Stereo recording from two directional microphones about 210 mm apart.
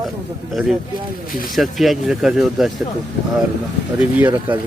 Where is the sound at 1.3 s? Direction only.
45° left (ahead or behind).